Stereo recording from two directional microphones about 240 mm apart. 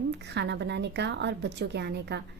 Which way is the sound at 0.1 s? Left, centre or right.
Right.